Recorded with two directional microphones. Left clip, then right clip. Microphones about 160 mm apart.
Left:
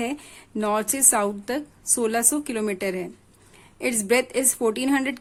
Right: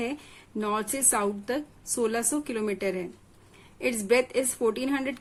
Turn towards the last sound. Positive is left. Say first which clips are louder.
# left 5 dB
turn(degrees=35)  # may be behind; listen again after turning